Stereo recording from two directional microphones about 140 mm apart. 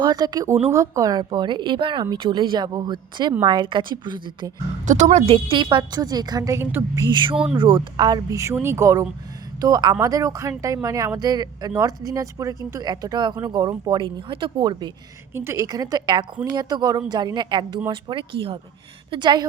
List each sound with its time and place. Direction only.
0.0 s speech: 30° right (ahead or behind)
5.1 s speech: 45° right (ahead or behind)
5.6 s speech: 30° right (ahead or behind)
7.1 s speech: 35° right (ahead or behind)
15.4 s speech: 20° right (ahead or behind)